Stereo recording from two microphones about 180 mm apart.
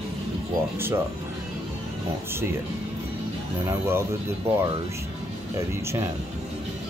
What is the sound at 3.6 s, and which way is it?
Speech, 15° right (ahead or behind).